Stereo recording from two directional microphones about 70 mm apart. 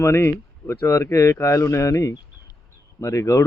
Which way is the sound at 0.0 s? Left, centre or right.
Left.